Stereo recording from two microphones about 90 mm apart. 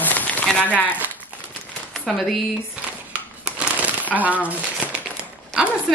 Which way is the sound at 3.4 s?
15° right (ahead or behind).